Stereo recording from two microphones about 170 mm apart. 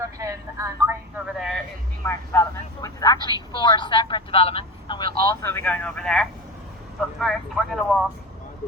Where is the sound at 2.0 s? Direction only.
15° left (ahead or behind).